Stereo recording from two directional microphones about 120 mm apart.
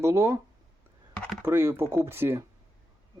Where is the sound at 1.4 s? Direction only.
20° right (ahead or behind).